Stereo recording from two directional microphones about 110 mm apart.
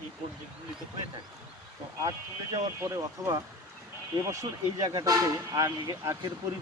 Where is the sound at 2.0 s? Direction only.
30° right (ahead or behind).